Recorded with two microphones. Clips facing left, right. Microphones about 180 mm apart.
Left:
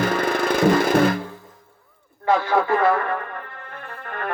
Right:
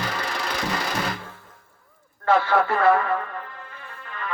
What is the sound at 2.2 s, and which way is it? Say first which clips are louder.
Speech: left 1 dB; 15° left (ahead or behind).